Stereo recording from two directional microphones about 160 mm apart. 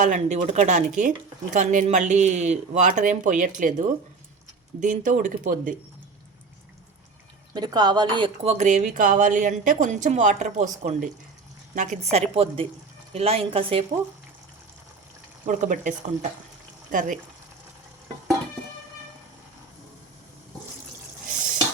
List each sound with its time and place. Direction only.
0.0 s a woman's voice: 50° right (ahead or behind)
7.5 s a woman's voice: 25° right (ahead or behind)
8.5 s a woman's voice: 50° right (ahead or behind); by 13.8 s 35° right (ahead or behind)
15.4 s a woman's voice: 55° right (ahead or behind)